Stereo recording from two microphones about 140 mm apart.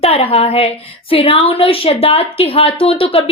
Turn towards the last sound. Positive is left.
turn(degrees=40)  # may be behind; listen again after turning